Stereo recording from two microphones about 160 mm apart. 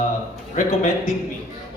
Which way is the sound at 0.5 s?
50° left (ahead or behind).